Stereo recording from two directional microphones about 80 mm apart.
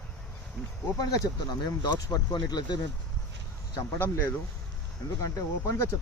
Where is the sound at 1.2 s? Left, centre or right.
Left.